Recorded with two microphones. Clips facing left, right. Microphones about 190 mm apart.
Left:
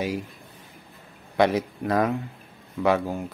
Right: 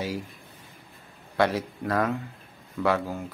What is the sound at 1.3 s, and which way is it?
Speech, 20° left (ahead or behind).